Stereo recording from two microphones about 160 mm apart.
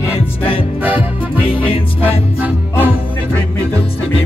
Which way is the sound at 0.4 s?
35° left (ahead or behind).